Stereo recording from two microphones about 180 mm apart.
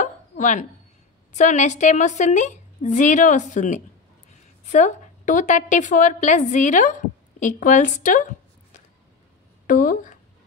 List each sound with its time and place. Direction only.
0.0 s hiccup: 45° left (ahead or behind)
1.3 s a woman's voice: 40° left (ahead or behind)
9.7 s speech: 45° left (ahead or behind)